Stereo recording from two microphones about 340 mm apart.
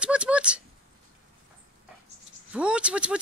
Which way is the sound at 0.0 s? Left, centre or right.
Centre.